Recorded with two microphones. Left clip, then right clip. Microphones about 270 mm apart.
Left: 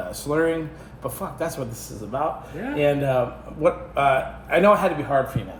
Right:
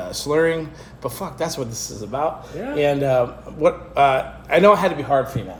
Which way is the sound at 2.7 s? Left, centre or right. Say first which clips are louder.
Right 3 dB; right.